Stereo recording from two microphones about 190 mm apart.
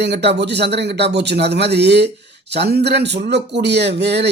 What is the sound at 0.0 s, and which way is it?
Speech, 60° right (ahead or behind).